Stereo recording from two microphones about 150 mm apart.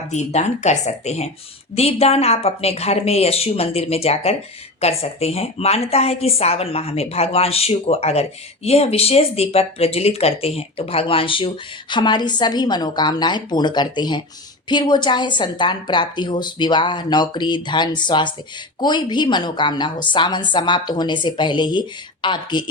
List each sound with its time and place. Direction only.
0.1 s a woman's voice: 50° left (ahead or behind); by 22.6 s 30° left (ahead or behind)